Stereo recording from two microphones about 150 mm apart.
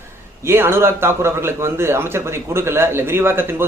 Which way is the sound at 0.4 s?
15° right (ahead or behind).